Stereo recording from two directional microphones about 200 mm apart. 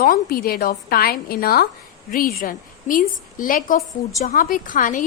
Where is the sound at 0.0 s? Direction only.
45° left (ahead or behind).